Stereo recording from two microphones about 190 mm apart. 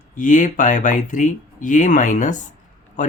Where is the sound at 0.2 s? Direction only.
45° left (ahead or behind).